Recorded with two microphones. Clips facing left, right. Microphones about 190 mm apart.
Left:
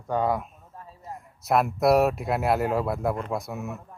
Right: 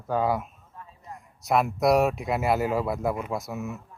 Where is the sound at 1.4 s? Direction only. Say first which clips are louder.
Left 1 dB; centre (ahead or behind).